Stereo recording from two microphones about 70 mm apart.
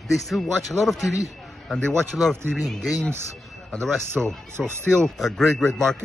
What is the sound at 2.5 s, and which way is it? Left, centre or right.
A man's voice, centre.